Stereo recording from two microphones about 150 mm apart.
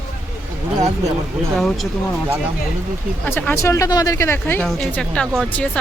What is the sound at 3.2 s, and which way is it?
Speech, 10° left (ahead or behind).